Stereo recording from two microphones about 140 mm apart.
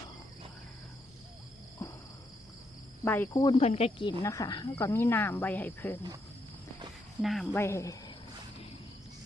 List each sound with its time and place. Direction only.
1.8 s a sound: 20° left (ahead or behind)
3.0 s cricket: 15° left (ahead or behind)
3.5 s speech: 45° left (ahead or behind)
4.2 s speech: 20° left (ahead or behind)
7.2 s speech: centre (ahead or behind)
7.5 s speech: 20° left (ahead or behind)